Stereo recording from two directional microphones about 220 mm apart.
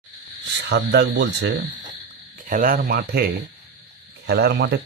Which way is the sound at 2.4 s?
40° right (ahead or behind).